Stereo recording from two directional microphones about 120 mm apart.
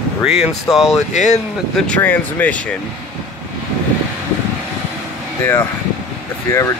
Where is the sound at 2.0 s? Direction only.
15° left (ahead or behind).